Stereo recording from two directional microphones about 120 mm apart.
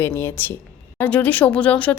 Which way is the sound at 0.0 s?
15° left (ahead or behind).